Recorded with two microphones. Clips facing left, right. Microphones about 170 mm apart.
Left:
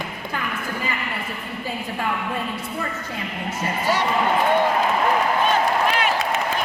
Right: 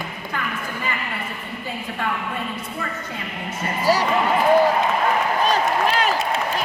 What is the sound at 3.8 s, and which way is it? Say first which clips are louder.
Speech: right 4 dB; 35° right (ahead or behind).